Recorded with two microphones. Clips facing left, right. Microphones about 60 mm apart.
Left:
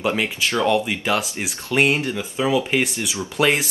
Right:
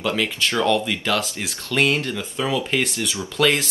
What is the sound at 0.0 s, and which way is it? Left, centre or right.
Speech, left.